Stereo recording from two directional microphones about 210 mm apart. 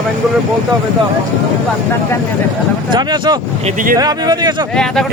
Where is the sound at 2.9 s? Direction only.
20° right (ahead or behind).